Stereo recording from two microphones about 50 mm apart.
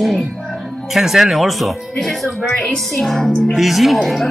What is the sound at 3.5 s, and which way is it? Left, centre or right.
Speech, centre.